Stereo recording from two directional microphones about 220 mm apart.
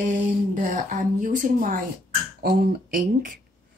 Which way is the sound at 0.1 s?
35° right (ahead or behind).